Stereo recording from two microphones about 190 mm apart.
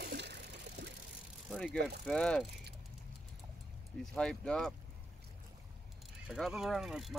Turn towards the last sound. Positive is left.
turn(degrees=0)  # may be behind; listen again after turning